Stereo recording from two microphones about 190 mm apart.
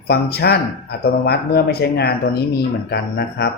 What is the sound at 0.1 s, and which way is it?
Speech, 55° left (ahead or behind).